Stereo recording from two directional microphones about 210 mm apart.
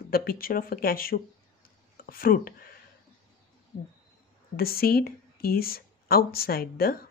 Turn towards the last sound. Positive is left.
turn(degrees=45)  # may be behind; listen again after turning